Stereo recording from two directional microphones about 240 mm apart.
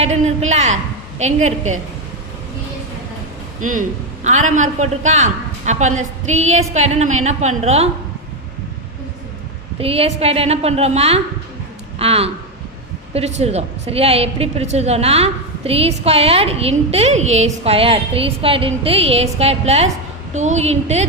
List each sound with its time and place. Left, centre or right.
0.0 s a woman's voice: right
3.6 s a woman's voice: right
9.7 s a woman's voice: right